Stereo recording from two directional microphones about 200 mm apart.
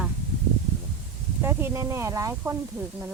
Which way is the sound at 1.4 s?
15° right (ahead or behind).